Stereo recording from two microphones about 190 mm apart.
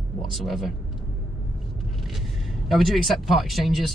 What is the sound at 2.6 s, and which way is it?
Speech, centre (ahead or behind).